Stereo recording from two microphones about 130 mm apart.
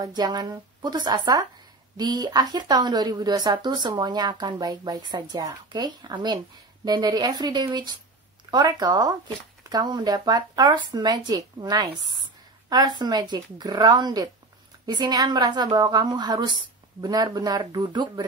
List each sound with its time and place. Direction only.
0.0 s a woman's voice: 30° right (ahead or behind)